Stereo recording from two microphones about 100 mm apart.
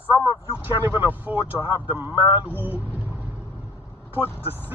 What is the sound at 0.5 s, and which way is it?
Speech, 20° right (ahead or behind).